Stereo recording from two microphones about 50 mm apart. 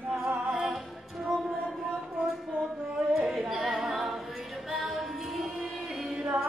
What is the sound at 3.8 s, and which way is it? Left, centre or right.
A capella, centre.